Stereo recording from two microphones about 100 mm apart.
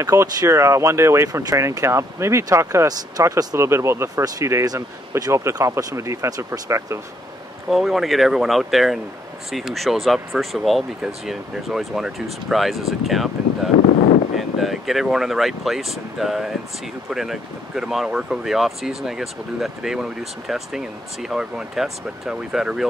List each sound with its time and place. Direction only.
0.0 s speech: 30° right (ahead or behind)
7.7 s speech: centre (ahead or behind)